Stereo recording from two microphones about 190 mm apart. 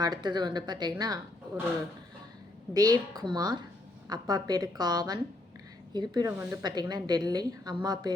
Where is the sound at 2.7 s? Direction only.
20° right (ahead or behind).